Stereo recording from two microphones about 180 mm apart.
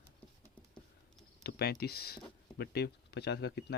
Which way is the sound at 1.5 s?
65° left (ahead or behind).